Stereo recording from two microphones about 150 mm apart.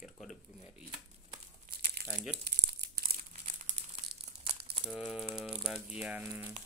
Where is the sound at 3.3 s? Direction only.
55° right (ahead or behind).